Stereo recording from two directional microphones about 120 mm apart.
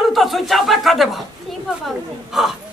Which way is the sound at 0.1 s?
Centre (ahead or behind).